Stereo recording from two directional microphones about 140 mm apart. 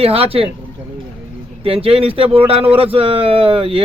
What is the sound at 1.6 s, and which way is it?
Speech, 40° right (ahead or behind).